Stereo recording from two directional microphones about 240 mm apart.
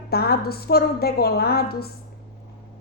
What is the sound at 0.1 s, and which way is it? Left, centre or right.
A woman's voice, left.